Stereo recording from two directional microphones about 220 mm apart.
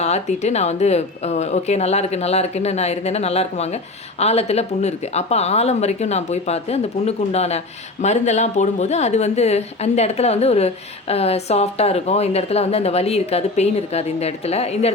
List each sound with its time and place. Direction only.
0.0 s a woman's voice: 30° left (ahead or behind)